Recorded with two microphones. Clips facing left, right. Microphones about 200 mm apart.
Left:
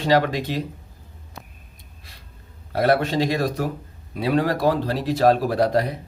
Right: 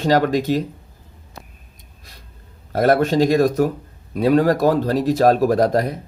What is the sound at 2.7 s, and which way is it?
Speech, 45° right (ahead or behind).